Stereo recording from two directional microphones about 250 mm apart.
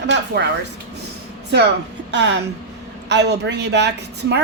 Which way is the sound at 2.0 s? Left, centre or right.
Right.